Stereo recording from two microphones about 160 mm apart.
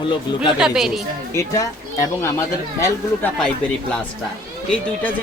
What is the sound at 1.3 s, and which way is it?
Speech, 20° left (ahead or behind).